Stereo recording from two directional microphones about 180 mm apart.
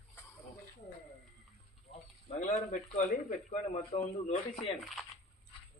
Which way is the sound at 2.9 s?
40° left (ahead or behind).